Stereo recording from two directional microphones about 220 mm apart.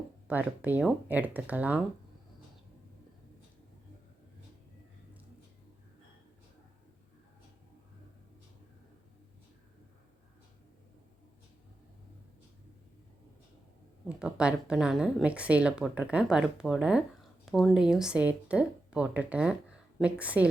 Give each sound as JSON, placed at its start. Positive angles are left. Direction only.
{"t": 0.3, "sound": "speech", "side_deg": -10}
{"t": 14.2, "sound": "a woman's voice", "side_deg": -5}